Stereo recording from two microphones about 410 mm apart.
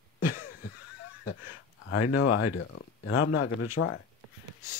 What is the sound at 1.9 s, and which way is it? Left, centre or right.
Speech, left.